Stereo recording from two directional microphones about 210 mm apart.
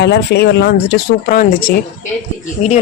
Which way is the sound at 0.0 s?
50° left (ahead or behind).